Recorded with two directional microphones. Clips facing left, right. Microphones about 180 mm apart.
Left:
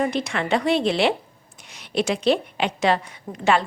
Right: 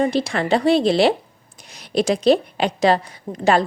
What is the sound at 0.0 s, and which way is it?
A woman's voice, 35° right (ahead or behind).